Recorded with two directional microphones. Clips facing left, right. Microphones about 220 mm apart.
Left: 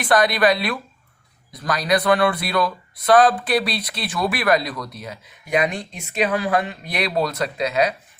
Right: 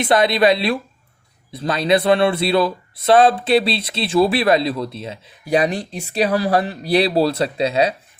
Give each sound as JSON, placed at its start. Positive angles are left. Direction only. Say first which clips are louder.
{"t": 0.0, "sound": "speech", "louder": "right 3 dB", "side_deg": -25}